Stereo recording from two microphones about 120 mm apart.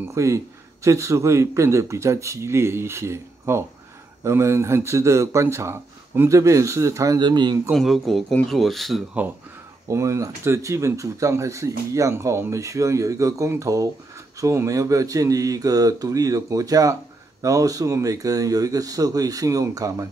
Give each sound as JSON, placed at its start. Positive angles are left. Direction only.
{"t": 0.0, "sound": "speech", "side_deg": -25}
{"t": 7.7, "sound": "speech", "side_deg": 0}
{"t": 9.8, "sound": "speech", "side_deg": -25}